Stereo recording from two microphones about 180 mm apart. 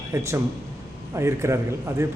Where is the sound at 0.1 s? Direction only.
15° right (ahead or behind).